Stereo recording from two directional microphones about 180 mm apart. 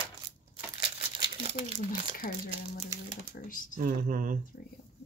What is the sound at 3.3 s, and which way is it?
Speech, 50° left (ahead or behind).